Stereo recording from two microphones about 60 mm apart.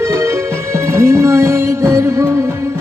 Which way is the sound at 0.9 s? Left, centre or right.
Right.